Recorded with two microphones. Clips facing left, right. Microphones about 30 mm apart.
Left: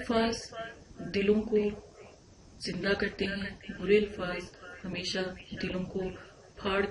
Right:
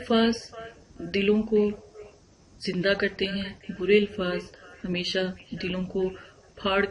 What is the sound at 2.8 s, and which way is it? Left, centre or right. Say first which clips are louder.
Speech: right 5 dB; right.